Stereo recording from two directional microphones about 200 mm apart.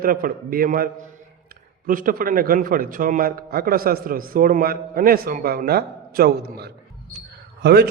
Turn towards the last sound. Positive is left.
turn(degrees=-55)  # may be behind; listen again after turning